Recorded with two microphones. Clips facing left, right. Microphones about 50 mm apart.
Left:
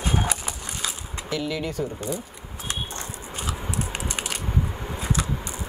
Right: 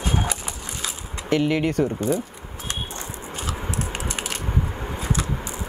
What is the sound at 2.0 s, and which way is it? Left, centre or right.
Speech, right.